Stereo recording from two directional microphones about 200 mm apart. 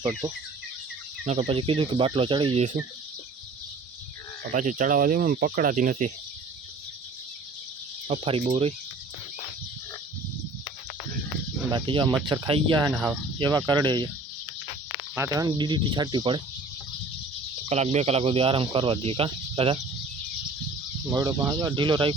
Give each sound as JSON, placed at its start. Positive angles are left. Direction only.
{"t": 0.0, "sound": "speech", "side_deg": -15}
{"t": 1.2, "sound": "speech", "side_deg": -30}
{"t": 4.5, "sound": "speech", "side_deg": -40}
{"t": 8.0, "sound": "speech", "side_deg": -30}
{"t": 11.7, "sound": "speech", "side_deg": -25}
{"t": 15.1, "sound": "speech", "side_deg": -15}
{"t": 17.7, "sound": "speech", "side_deg": -35}
{"t": 21.1, "sound": "speech", "side_deg": -15}